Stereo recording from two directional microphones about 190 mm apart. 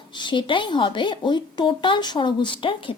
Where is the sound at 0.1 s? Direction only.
25° left (ahead or behind).